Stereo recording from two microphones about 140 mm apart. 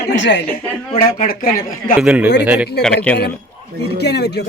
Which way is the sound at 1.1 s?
85° left.